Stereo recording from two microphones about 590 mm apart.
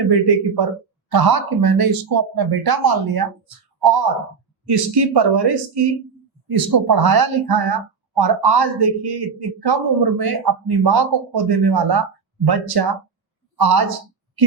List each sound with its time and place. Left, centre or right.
0.1 s speech: right